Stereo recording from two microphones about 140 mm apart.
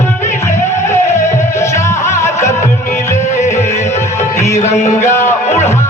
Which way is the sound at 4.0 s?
20° left (ahead or behind).